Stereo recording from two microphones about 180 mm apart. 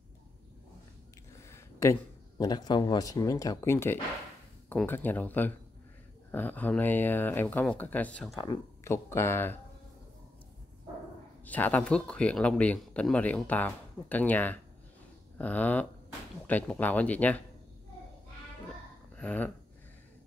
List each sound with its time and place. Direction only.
1.3 s speech: 15° left (ahead or behind)
11.4 s speech: 10° left (ahead or behind)
19.1 s speech: 10° left (ahead or behind)